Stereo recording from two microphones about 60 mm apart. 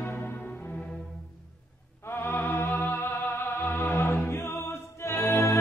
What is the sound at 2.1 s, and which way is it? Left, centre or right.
Music, left.